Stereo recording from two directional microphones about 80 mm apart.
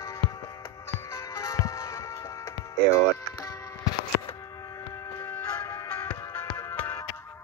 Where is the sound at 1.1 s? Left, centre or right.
Left.